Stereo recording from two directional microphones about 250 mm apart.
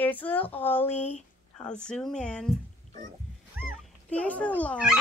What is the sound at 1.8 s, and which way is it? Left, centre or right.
Speech, centre.